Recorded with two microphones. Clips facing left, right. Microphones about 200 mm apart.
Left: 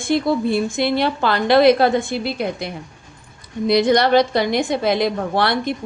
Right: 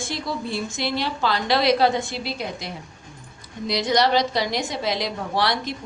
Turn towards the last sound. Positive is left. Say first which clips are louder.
# left 5 dB
turn(degrees=55)  # may be behind; listen again after turning